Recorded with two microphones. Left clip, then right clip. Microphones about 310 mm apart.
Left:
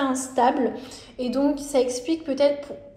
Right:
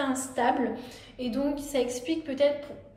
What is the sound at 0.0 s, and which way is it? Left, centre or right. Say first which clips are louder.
A woman's voice: left 6 dB; centre.